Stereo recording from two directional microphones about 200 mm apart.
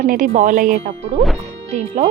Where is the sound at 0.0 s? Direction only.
40° right (ahead or behind).